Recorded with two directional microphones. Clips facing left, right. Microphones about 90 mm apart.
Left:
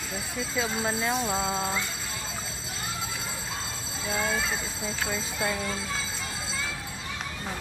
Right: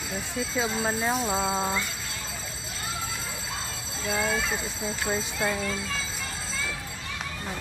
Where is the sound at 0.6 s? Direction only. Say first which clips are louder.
Right 1 dB; 15° right (ahead or behind).